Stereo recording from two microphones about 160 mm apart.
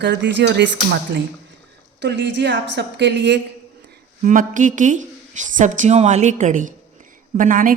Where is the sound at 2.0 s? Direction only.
90° right.